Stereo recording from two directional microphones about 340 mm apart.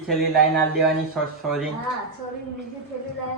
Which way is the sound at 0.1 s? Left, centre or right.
Centre.